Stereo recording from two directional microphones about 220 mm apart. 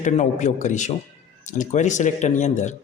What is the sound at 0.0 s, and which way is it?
Speech, 30° left (ahead or behind).